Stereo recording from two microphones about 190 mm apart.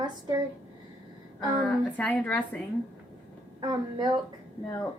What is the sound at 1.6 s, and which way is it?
Speech, 5° left (ahead or behind).